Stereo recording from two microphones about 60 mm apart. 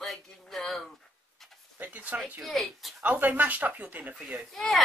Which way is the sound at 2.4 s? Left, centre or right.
Centre.